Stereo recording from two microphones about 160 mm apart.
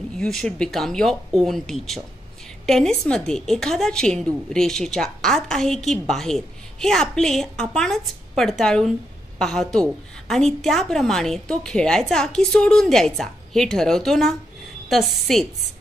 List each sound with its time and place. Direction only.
0.2 s a woman's voice: 5° left (ahead or behind)